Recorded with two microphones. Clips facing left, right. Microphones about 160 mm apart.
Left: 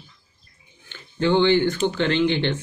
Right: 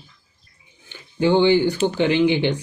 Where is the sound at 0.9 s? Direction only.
15° right (ahead or behind).